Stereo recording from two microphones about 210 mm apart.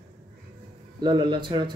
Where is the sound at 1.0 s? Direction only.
20° right (ahead or behind).